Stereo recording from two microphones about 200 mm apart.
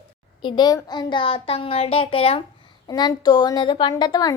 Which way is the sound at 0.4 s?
20° left (ahead or behind).